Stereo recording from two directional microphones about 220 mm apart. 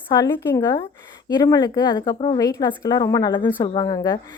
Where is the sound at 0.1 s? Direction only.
15° left (ahead or behind).